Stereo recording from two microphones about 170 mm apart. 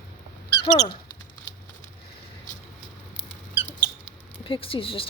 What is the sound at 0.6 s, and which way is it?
Speech, 25° left (ahead or behind).